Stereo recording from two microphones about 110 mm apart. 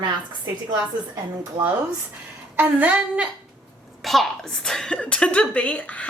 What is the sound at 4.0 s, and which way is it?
A woman's voice, centre (ahead or behind).